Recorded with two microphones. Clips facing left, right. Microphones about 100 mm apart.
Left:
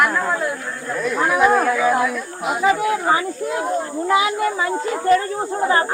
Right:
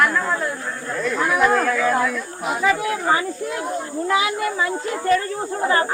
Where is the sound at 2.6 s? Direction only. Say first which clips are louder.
Left 3 dB; 25° left (ahead or behind).